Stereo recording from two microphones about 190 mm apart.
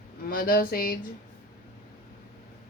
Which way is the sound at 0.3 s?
50° left (ahead or behind).